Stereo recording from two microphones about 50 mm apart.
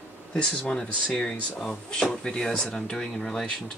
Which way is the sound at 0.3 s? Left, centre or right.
Centre.